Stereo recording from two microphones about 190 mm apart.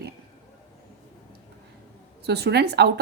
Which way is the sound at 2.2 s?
60° right (ahead or behind).